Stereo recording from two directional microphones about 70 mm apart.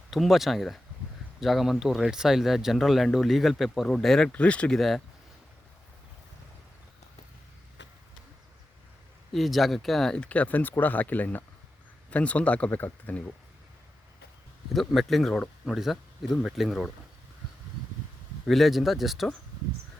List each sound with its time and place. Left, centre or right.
0.1 s speech: centre
4.3 s speech: centre
4.8 s speech: centre
9.3 s speech: centre
10.2 s speech: centre
14.7 s speech: centre
18.4 s speech: centre